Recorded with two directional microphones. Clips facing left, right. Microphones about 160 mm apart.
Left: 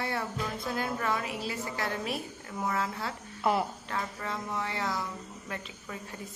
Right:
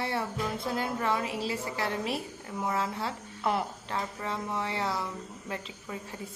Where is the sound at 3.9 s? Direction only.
25° right (ahead or behind).